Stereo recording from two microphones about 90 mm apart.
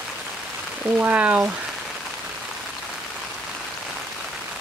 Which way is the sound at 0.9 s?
20° right (ahead or behind).